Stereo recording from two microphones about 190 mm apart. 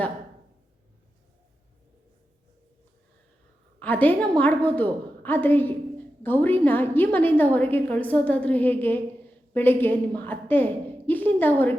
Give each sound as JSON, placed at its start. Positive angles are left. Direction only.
{"t": 3.8, "sound": "a woman's voice", "side_deg": 10}